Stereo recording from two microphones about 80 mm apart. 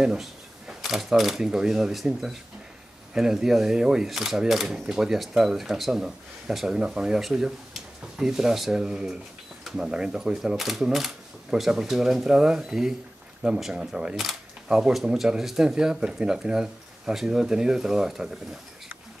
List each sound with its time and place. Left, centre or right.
0.0 s speech: centre